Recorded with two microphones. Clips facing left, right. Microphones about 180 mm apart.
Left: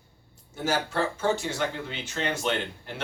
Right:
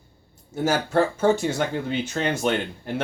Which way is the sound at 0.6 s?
45° right (ahead or behind).